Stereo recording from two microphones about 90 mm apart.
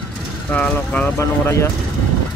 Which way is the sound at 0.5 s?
15° left (ahead or behind).